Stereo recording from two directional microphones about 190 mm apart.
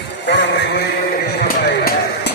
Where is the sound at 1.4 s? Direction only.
55° left (ahead or behind).